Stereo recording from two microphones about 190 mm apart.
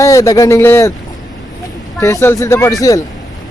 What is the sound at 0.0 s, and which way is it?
Speech, 15° left (ahead or behind).